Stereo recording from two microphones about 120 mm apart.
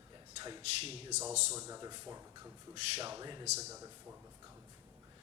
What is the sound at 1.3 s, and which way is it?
Speech, 70° right (ahead or behind).